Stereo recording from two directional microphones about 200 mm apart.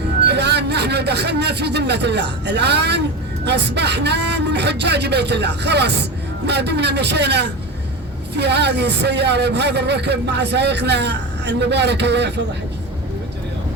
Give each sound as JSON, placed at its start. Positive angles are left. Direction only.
{"t": 0.3, "sound": "a man's voice", "side_deg": -55}